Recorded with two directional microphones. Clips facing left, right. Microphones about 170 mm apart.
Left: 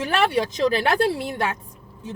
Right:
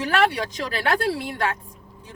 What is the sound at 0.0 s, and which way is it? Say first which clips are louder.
Speech: left 1 dB; 25° left (ahead or behind).